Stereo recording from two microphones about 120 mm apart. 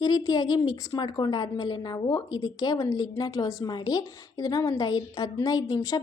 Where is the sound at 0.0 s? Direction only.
35° left (ahead or behind).